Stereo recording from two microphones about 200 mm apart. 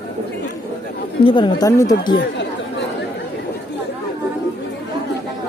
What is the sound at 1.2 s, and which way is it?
Speech, 25° left (ahead or behind).